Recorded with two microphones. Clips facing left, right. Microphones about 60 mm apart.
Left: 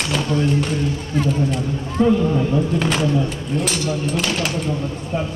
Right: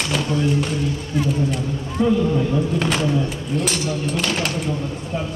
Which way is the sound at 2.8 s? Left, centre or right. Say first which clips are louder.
Left 1 dB; centre.